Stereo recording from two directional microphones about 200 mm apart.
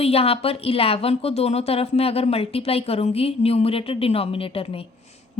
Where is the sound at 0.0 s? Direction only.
30° left (ahead or behind).